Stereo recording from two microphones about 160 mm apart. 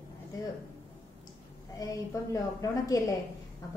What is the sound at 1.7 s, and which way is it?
A woman's voice, 20° left (ahead or behind).